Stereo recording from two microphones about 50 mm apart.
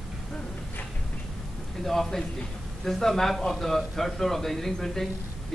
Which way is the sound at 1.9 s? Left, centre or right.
Centre.